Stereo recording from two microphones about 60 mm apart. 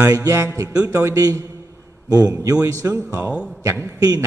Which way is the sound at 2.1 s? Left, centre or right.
Right.